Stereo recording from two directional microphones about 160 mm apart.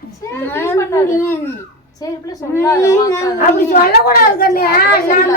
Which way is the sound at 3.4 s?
65° left (ahead or behind).